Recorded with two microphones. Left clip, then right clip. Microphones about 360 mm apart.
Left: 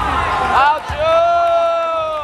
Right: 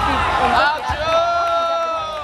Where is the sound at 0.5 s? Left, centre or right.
Centre.